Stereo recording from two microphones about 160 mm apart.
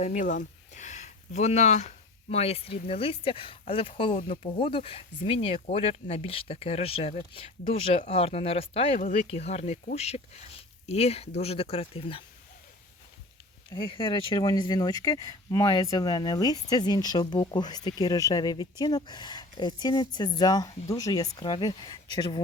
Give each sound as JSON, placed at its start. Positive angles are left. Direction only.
{"t": 0.0, "sound": "a sound", "side_deg": 50}
{"t": 2.3, "sound": "speech", "side_deg": 40}
{"t": 13.7, "sound": "speech", "side_deg": 30}